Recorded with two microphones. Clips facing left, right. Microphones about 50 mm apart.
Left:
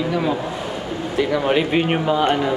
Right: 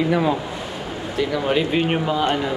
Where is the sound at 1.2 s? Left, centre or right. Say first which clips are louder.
Left 2 dB; centre.